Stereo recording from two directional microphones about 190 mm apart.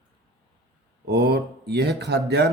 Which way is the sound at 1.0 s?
60° right (ahead or behind).